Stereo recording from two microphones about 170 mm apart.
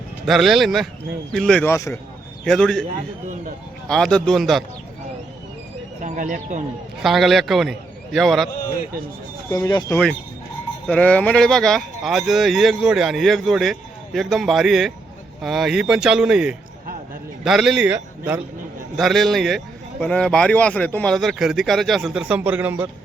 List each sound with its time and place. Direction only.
0.3 s speech: centre (ahead or behind); by 2.0 s 15° left (ahead or behind)
2.4 s a man's voice: 5° left (ahead or behind)
3.8 s speech: 5° left (ahead or behind)
6.0 s speech: 45° right (ahead or behind)
7.0 s speech: centre (ahead or behind)
9.5 s speech: 20° left (ahead or behind); by 22.9 s 10° right (ahead or behind)